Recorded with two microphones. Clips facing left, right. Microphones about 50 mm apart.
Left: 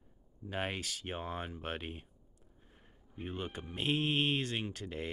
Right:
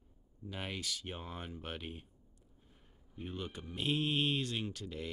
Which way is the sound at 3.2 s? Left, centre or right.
Left.